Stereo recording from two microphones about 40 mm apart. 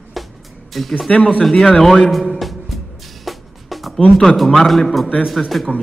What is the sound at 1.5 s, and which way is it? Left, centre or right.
Speech, centre.